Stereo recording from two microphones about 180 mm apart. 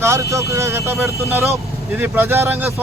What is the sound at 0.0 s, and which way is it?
A man's voice, 15° right (ahead or behind).